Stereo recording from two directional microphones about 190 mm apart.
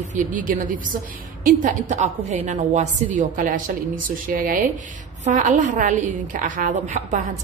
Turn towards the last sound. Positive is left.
turn(degrees=-40)  # may be behind; listen again after turning